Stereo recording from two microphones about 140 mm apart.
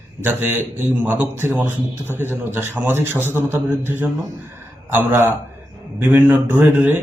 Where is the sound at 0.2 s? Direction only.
15° right (ahead or behind).